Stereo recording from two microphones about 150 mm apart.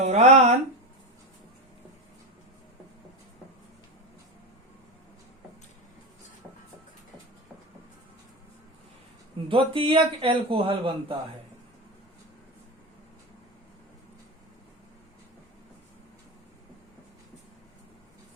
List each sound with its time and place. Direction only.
0.0 s speech: 50° right (ahead or behind)
9.5 s a man's voice: 35° right (ahead or behind)